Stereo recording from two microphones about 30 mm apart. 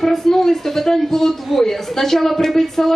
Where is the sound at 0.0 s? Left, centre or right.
Centre.